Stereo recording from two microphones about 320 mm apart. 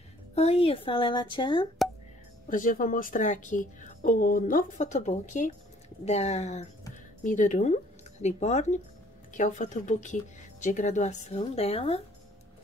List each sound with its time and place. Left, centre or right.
0.3 s a woman's voice: centre
2.5 s speech: left